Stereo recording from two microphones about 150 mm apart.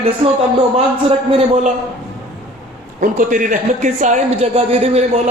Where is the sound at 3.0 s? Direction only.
60° right (ahead or behind).